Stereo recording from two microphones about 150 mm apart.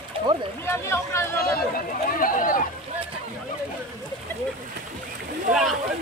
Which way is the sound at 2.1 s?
65° left (ahead or behind).